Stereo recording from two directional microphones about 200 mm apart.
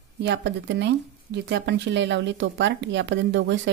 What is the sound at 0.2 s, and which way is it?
Speech, 60° right (ahead or behind).